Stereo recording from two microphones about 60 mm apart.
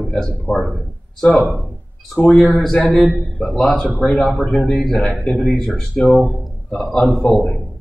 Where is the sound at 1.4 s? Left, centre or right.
Centre.